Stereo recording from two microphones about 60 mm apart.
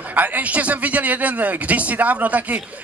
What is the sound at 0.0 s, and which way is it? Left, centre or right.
A man's voice, right.